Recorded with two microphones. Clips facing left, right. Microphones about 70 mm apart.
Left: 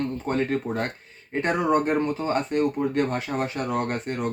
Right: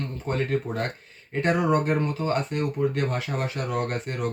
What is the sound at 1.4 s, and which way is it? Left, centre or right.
Speech, left.